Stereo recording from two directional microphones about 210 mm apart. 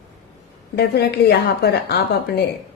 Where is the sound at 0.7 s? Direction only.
50° left (ahead or behind).